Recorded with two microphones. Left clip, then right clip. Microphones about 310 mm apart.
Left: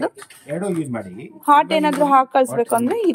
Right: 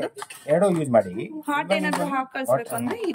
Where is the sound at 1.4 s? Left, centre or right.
Centre.